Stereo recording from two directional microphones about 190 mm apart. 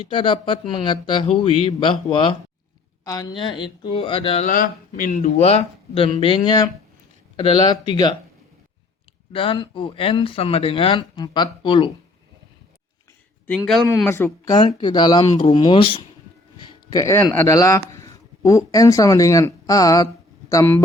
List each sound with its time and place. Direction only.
0.0 s speech: 25° left (ahead or behind)
3.0 s speech: 20° left (ahead or behind)
4.4 s speech: 45° left (ahead or behind); by 8.1 s 20° left (ahead or behind)
9.3 s speech: 30° left (ahead or behind)
13.6 s speech: centre (ahead or behind)
14.1 s speech: 15° left (ahead or behind)